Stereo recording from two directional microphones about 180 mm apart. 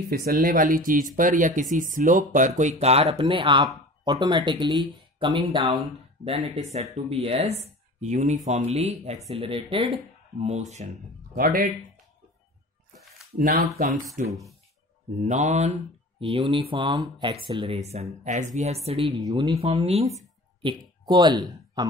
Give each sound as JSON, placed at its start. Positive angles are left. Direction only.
{"t": 0.1, "sound": "speech", "side_deg": -55}
{"t": 7.1, "sound": "speech", "side_deg": -35}
{"t": 11.3, "sound": "speech", "side_deg": -50}
{"t": 13.4, "sound": "speech", "side_deg": -55}
{"t": 21.0, "sound": "speech", "side_deg": -25}